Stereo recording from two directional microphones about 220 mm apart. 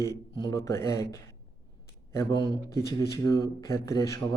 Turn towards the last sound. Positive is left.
turn(degrees=15)  # may be behind; listen again after turning